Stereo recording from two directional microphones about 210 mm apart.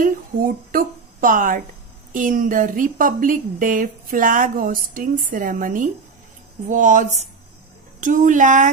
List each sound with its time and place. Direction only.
0.0 s a woman's voice: 40° right (ahead or behind)